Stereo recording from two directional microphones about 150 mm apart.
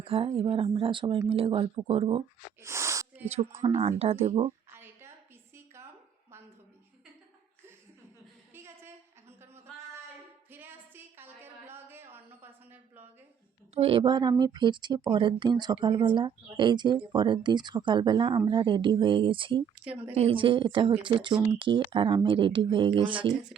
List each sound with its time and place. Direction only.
0.0 s speech: 40° right (ahead or behind)
2.6 s snort: 20° right (ahead or behind)
3.6 s speech: 40° right (ahead or behind)
4.7 s a sound: 15° right (ahead or behind)
8.5 s a sound: 15° right (ahead or behind)
10.5 s a sound: 15° right (ahead or behind)
13.7 s speech: 40° right (ahead or behind)
19.7 s a woman's voice: 10° right (ahead or behind)
20.1 s speech: 40° right (ahead or behind)